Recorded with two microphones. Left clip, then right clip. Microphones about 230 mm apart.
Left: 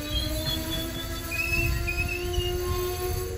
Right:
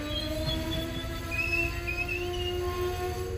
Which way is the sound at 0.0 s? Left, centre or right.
Left.